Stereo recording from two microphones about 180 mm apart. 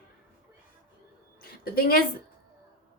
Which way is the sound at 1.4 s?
55° left (ahead or behind).